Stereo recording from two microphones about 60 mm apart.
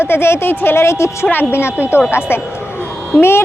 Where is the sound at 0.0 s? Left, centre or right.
Left.